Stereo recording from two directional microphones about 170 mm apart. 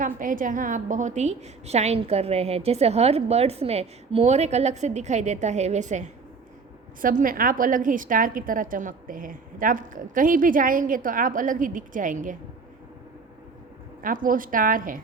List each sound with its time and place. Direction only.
0.0 s a woman's voice: 55° right (ahead or behind)
14.0 s a woman's voice: 55° right (ahead or behind)